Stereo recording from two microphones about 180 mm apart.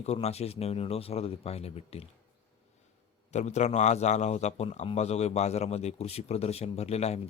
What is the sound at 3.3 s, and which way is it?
A man's voice, 40° left (ahead or behind).